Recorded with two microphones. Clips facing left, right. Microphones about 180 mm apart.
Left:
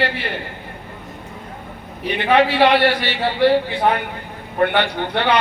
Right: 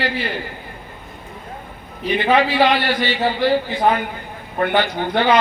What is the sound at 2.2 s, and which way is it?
A man's voice, 65° left (ahead or behind).